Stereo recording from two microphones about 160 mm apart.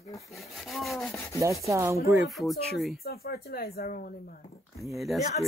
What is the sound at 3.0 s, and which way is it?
Speech, 70° left (ahead or behind).